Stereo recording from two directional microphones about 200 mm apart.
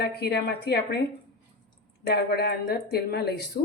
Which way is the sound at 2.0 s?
50° left (ahead or behind).